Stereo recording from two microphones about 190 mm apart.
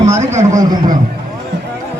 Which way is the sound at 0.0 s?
40° right (ahead or behind).